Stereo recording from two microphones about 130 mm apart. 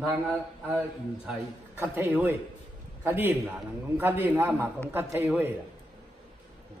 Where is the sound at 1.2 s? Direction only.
10° right (ahead or behind).